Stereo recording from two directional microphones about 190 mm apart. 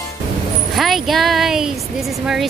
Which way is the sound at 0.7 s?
Centre (ahead or behind).